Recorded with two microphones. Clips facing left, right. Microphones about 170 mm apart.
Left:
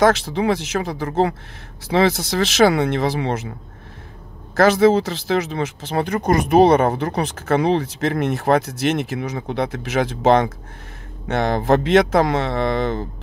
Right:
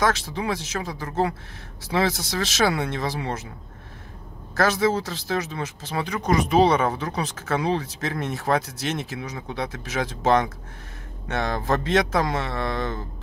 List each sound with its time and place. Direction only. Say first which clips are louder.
0.0 s speech: left 8 dB; 65° left (ahead or behind)
4.6 s speech: left 8 dB; 60° left (ahead or behind)